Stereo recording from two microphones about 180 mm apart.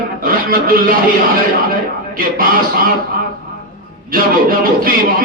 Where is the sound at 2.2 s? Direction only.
50° right (ahead or behind).